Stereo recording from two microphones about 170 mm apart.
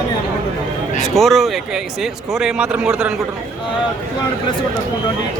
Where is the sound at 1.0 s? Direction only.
Centre (ahead or behind).